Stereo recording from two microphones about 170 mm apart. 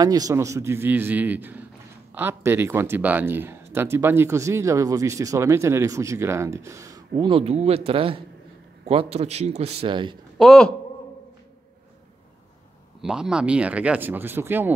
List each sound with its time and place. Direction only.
0.0 s a man's voice: 20° right (ahead or behind)
10.3 s a man's voice: centre (ahead or behind)
13.0 s speech: 5° right (ahead or behind)